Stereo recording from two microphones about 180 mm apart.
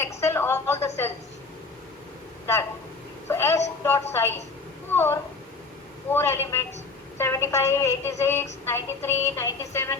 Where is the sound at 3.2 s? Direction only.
15° left (ahead or behind).